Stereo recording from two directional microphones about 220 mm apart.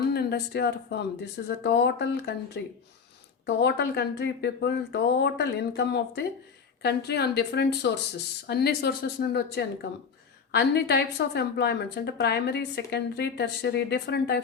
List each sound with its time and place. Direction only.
0.1 s speech: 45° left (ahead or behind)